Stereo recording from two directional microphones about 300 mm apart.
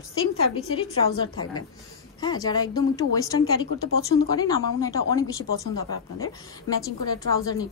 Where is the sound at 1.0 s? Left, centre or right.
Centre.